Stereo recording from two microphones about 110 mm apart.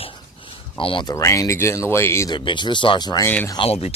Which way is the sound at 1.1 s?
25° left (ahead or behind).